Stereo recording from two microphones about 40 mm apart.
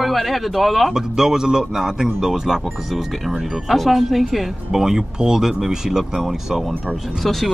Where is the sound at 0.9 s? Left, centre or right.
Centre.